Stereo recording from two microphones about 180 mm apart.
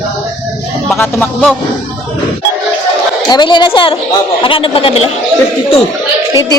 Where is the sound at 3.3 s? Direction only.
25° left (ahead or behind).